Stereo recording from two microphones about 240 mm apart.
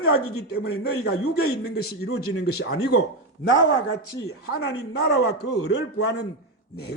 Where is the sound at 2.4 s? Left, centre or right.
Left.